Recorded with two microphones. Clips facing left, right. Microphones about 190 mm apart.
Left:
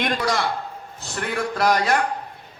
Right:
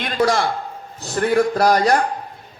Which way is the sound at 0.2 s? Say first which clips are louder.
Right 6 dB; 50° right (ahead or behind).